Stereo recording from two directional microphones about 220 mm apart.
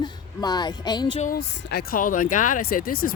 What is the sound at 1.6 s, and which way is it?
Speech, 50° left (ahead or behind).